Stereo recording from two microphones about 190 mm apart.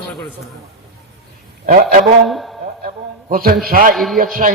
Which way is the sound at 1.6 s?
45° right (ahead or behind).